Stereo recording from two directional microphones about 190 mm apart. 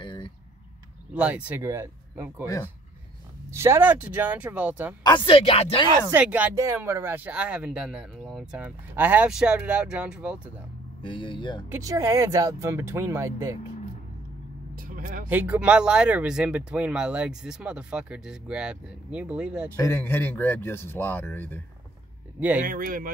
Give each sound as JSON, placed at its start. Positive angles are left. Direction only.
{"t": 0.0, "sound": "a sound", "side_deg": 25}
{"t": 1.1, "sound": "speech", "side_deg": -10}
{"t": 2.4, "sound": "a man's voice", "side_deg": 15}
{"t": 3.4, "sound": "speech", "side_deg": -15}
{"t": 5.0, "sound": "speech", "side_deg": 25}
{"t": 6.0, "sound": "speech", "side_deg": -10}
{"t": 11.0, "sound": "speech", "side_deg": 25}
{"t": 11.7, "sound": "speech", "side_deg": -15}
{"t": 14.8, "sound": "vehicle", "side_deg": -45}
{"t": 15.2, "sound": "speech", "side_deg": -10}
{"t": 19.7, "sound": "a man's voice", "side_deg": 10}
{"t": 22.6, "sound": "speech", "side_deg": -45}